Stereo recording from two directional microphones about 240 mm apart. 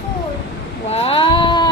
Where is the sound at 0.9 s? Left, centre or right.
Left.